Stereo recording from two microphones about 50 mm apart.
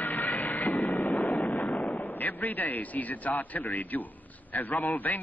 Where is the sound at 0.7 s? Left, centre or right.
Left.